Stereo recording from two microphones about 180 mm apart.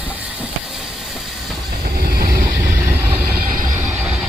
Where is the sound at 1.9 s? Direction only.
55° right (ahead or behind).